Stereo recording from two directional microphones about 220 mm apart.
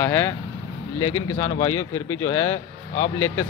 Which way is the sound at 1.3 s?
15° left (ahead or behind).